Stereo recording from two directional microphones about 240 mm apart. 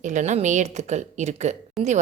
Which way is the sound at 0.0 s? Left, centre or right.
Right.